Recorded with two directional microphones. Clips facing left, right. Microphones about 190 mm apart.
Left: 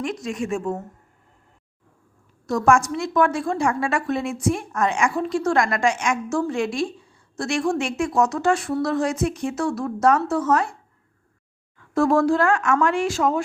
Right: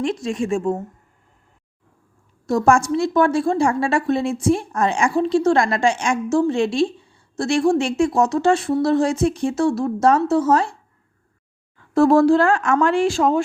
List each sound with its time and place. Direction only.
0.0 s a woman's voice: 30° right (ahead or behind)
2.5 s a woman's voice: 30° right (ahead or behind)
11.9 s speech: 30° right (ahead or behind)